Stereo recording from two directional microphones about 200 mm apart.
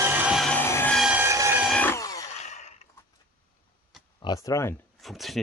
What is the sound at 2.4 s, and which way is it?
Gasp, 35° left (ahead or behind).